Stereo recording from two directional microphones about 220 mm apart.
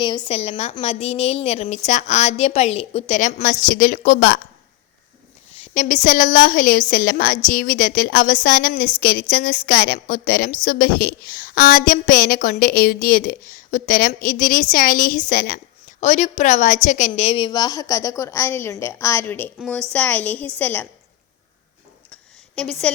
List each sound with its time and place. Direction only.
0.0 s a woman's voice: 25° left (ahead or behind); by 4.4 s 40° left (ahead or behind)
5.5 s a woman's voice: 35° left (ahead or behind); by 20.8 s 10° left (ahead or behind)
22.1 s a sound: 5° left (ahead or behind)